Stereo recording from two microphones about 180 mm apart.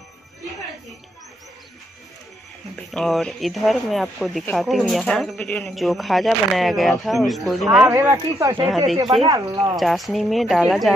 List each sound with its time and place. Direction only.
2.9 s speech: 5° left (ahead or behind)
7.9 s speech: 15° right (ahead or behind)
8.6 s speech: centre (ahead or behind)
9.2 s speech: 20° right (ahead or behind)
9.8 s speech: centre (ahead or behind)